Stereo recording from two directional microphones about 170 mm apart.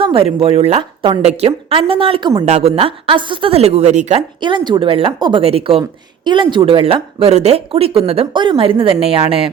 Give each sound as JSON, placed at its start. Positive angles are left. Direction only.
{"t": 0.0, "sound": "speech", "side_deg": -30}
{"t": 4.4, "sound": "speech", "side_deg": -25}